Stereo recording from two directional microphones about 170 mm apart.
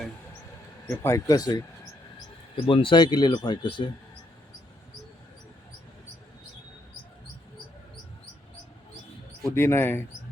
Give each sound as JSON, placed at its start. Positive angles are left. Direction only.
{"t": 0.9, "sound": "speech", "side_deg": 15}
{"t": 9.6, "sound": "speech", "side_deg": 15}